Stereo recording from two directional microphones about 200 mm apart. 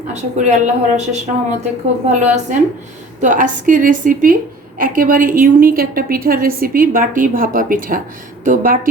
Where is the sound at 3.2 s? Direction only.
40° right (ahead or behind).